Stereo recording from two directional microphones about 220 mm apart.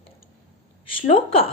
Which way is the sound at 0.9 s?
25° left (ahead or behind).